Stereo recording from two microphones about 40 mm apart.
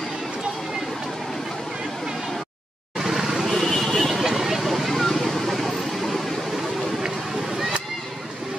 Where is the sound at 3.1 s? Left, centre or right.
Centre.